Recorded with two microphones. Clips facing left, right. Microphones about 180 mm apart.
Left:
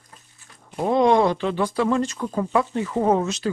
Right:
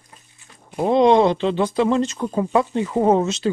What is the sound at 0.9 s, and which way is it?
Speech, 25° right (ahead or behind).